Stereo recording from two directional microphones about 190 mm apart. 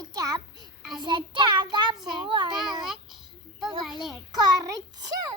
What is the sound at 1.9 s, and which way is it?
Speech, centre (ahead or behind).